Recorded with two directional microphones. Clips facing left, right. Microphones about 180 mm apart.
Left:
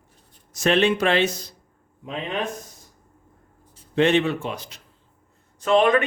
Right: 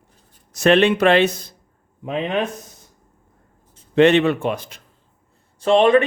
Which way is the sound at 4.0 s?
65° right (ahead or behind).